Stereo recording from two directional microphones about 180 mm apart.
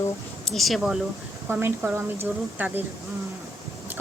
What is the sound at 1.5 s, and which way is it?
Speech, 10° right (ahead or behind).